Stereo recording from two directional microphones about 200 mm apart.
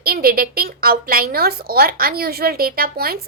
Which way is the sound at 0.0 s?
50° right (ahead or behind).